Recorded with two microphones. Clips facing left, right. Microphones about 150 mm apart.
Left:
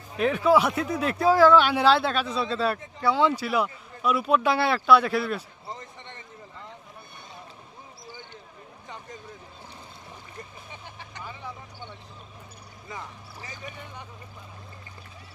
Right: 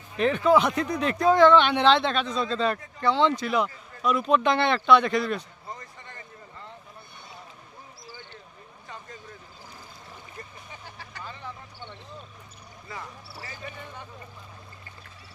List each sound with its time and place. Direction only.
0.2 s speech: 5° left (ahead or behind)
5.7 s basketball bounce: 20° left (ahead or behind)
8.0 s basketball bounce: 20° left (ahead or behind)
11.2 s vehicle: 10° left (ahead or behind)
12.9 s a sound: 20° left (ahead or behind)